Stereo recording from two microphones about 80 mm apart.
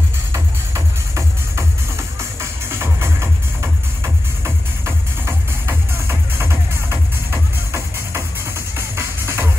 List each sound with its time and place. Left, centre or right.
0.3 s music: right
2.7 s music: right